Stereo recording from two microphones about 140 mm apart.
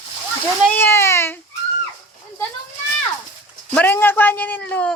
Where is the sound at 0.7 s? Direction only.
15° left (ahead or behind).